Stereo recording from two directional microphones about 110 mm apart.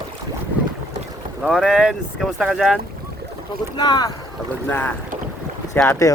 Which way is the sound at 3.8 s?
40° left (ahead or behind).